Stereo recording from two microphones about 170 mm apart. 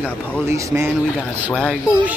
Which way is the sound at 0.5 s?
15° right (ahead or behind).